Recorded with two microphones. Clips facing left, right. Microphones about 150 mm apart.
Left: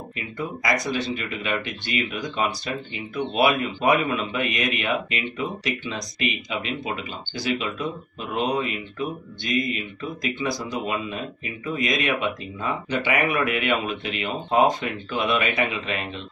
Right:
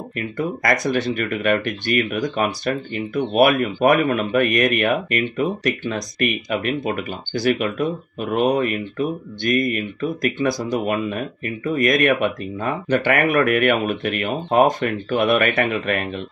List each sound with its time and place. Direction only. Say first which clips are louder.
0.1 s speech: right 7 dB; 55° right (ahead or behind)